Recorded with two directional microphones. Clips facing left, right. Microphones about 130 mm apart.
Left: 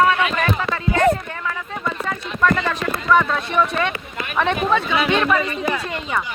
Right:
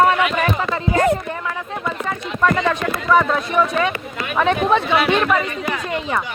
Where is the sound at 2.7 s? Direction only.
10° right (ahead or behind).